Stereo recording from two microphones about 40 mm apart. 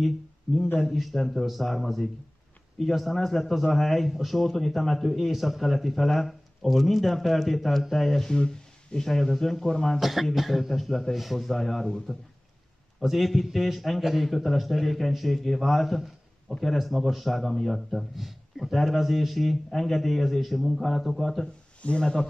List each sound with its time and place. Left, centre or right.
0.7 s a man's voice: centre
8.3 s a man's voice: centre
9.9 s a man's voice: centre
21.8 s speech: left